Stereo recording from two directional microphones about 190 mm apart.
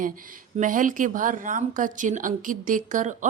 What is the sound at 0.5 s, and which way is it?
A woman's voice, 45° right (ahead or behind).